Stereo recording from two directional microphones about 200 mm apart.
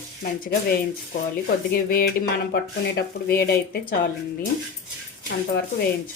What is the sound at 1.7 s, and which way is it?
Speech, 50° left (ahead or behind).